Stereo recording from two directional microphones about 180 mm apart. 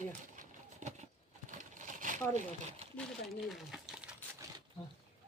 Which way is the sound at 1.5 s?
45° right (ahead or behind).